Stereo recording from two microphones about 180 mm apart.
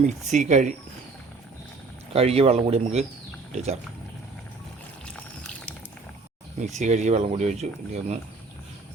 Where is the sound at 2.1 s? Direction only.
35° right (ahead or behind).